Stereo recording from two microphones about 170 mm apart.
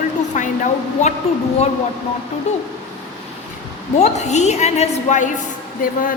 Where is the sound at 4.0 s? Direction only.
40° left (ahead or behind).